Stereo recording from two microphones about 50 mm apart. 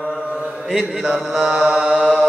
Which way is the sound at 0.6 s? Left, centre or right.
Centre.